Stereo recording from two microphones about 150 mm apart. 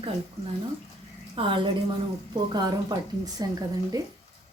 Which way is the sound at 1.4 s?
35° right (ahead or behind).